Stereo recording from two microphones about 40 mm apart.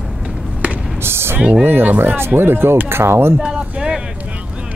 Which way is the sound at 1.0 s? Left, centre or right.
Right.